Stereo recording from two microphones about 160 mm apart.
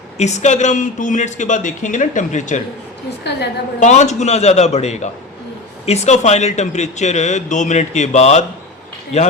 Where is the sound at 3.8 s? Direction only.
45° left (ahead or behind).